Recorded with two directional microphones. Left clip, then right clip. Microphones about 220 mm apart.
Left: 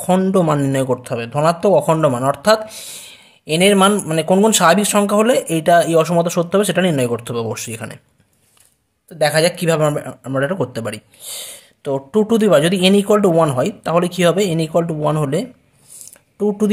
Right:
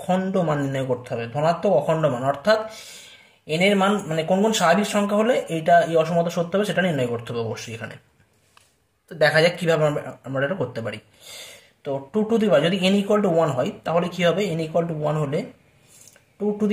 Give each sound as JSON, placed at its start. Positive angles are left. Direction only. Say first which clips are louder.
{"t": 0.0, "sound": "a man's voice", "louder": "left 7 dB", "side_deg": 40}
{"t": 9.1, "sound": "a man's voice", "louder": "left 2 dB", "side_deg": 30}
{"t": 16.1, "sound": "a sound", "louder": "left 6 dB", "side_deg": 40}